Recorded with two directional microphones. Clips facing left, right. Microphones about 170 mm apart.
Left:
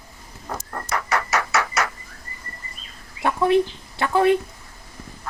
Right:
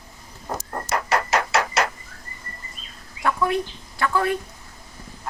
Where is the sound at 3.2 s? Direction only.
25° left (ahead or behind).